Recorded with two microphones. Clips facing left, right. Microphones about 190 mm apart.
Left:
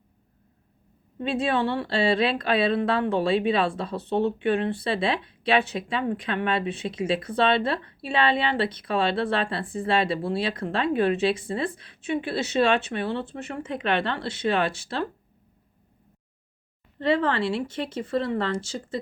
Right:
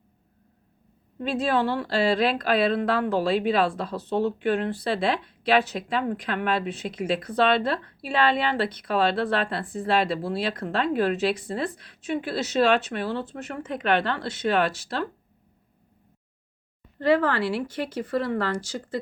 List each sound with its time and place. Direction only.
1.3 s speech: 25° left (ahead or behind)
17.0 s speech: 25° left (ahead or behind)